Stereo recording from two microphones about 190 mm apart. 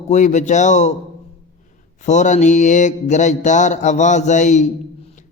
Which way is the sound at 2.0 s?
40° left (ahead or behind).